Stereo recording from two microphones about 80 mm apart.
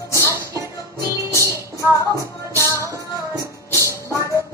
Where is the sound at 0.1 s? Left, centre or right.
Right.